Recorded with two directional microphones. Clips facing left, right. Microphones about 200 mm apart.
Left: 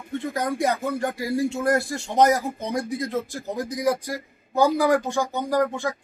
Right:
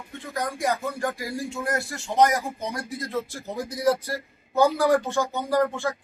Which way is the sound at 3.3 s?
15° left (ahead or behind).